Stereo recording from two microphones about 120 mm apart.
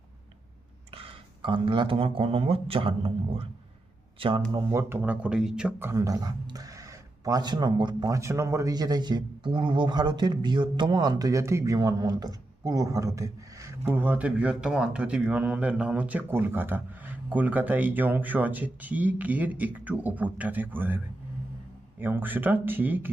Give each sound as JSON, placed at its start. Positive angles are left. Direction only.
{"t": 0.9, "sound": "speech", "side_deg": -50}
{"t": 4.5, "sound": "speech", "side_deg": -25}
{"t": 5.8, "sound": "speech", "side_deg": -25}
{"t": 8.1, "sound": "speech", "side_deg": -25}